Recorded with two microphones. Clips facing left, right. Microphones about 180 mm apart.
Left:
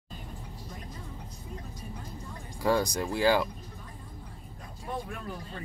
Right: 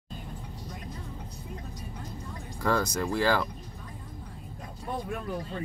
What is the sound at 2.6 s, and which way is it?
Speech, 15° left (ahead or behind).